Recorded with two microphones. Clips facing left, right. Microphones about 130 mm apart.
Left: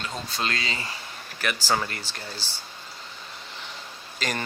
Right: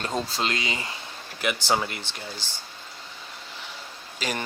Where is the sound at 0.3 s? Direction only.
20° right (ahead or behind).